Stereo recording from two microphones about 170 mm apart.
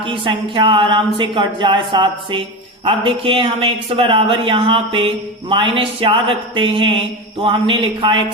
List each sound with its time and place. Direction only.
0.0 s speech: 30° right (ahead or behind)